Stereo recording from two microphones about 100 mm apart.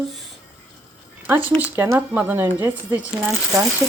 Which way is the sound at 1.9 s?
20° right (ahead or behind).